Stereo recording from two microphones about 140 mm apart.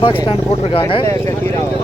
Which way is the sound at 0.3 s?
45° left (ahead or behind).